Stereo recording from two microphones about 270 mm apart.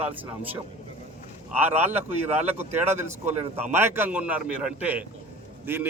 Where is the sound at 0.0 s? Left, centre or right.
Centre.